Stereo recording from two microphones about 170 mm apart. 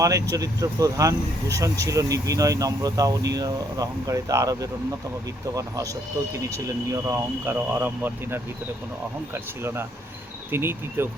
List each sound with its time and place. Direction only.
0.0 s speech: 20° right (ahead or behind)